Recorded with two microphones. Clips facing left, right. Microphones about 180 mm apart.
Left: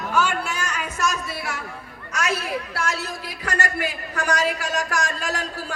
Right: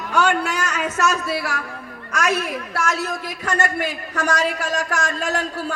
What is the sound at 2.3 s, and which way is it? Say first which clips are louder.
Speech: right 3 dB; 30° left (ahead or behind).